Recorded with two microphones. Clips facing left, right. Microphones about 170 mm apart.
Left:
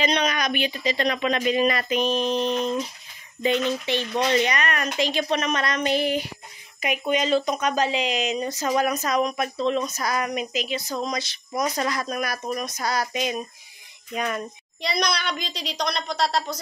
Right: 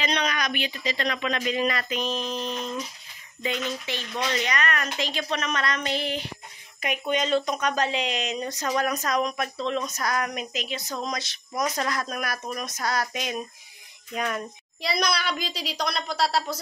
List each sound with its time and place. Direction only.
0.0 s speech: 20° left (ahead or behind)
4.2 s speech: 30° left (ahead or behind)
4.6 s speech: 15° left (ahead or behind); by 16.5 s 5° right (ahead or behind)